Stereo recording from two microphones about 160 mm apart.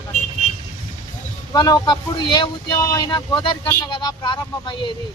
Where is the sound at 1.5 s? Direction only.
25° left (ahead or behind).